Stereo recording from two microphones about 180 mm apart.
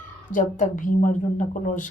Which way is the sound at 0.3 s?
45° left (ahead or behind).